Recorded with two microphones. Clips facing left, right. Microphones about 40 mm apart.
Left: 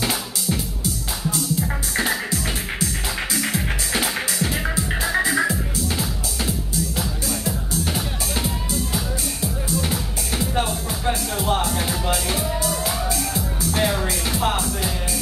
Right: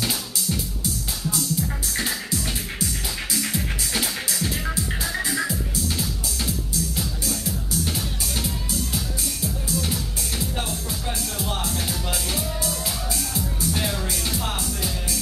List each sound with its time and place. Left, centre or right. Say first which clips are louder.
0.0 s music: left 3 dB; left
3.3 s music: left 3 dB; left